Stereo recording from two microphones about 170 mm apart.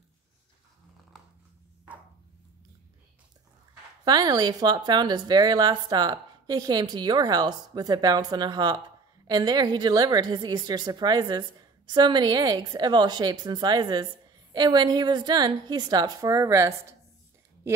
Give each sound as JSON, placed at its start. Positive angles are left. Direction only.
{"t": 4.0, "sound": "speech", "side_deg": -25}